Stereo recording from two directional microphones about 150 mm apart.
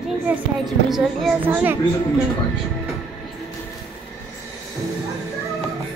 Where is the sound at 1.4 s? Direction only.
10° right (ahead or behind).